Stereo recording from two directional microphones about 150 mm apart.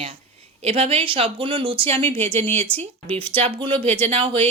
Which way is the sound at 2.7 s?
15° right (ahead or behind).